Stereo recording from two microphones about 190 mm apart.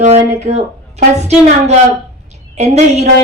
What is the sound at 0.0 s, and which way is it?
Speech, 35° right (ahead or behind).